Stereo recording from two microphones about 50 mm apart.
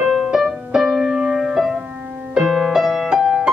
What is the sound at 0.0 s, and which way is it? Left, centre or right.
Music, centre.